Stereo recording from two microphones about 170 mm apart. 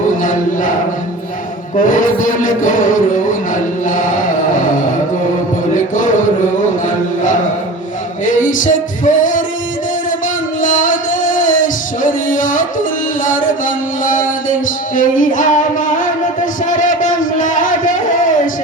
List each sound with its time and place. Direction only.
0.2 s a sound: 50° left (ahead or behind)
1.8 s music: 50° left (ahead or behind)
5.7 s music: 50° left (ahead or behind)
8.2 s music: 50° left (ahead or behind)
10.6 s music: 50° left (ahead or behind)
16.6 s a sound: 50° left (ahead or behind)